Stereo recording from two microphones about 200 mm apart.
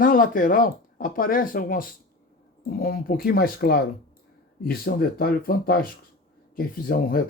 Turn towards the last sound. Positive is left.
turn(degrees=45)  # may be behind; listen again after turning